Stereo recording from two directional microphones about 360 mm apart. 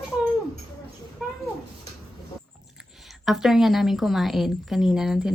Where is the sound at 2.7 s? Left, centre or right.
Centre.